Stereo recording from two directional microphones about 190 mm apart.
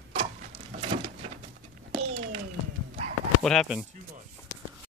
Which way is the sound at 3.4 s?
5° left (ahead or behind).